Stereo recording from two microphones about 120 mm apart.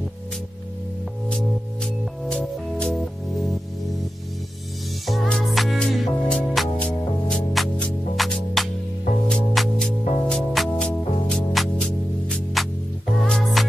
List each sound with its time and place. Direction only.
1.3 s music: 5° left (ahead or behind)
5.0 s music: centre (ahead or behind)